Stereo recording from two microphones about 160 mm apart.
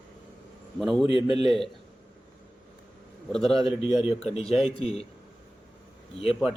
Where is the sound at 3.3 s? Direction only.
Centre (ahead or behind).